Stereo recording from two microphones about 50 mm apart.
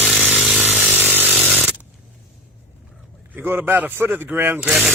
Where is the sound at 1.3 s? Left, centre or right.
Right.